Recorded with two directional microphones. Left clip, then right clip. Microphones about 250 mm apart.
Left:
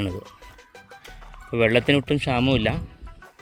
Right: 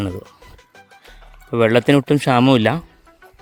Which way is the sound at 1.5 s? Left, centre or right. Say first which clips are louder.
Right 5 dB; right.